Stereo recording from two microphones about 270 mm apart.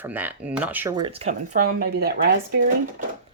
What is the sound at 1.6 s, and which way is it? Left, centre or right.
Speech, right.